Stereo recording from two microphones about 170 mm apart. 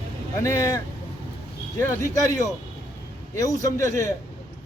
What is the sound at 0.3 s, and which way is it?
Speech, 15° left (ahead or behind).